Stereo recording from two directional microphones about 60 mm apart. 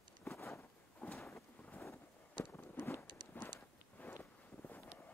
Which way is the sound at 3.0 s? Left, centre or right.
Left.